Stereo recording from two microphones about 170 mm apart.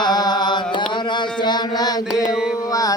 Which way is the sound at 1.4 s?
25° left (ahead or behind).